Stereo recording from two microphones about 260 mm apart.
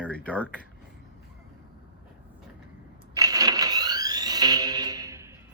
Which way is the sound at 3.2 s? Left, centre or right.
Centre.